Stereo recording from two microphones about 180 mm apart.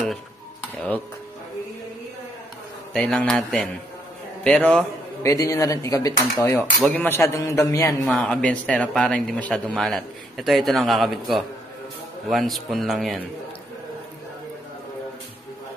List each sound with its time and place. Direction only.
2.9 s a man's voice: 5° left (ahead or behind)
5.2 s speech: 15° left (ahead or behind)
8.0 s a man's voice: 5° left (ahead or behind)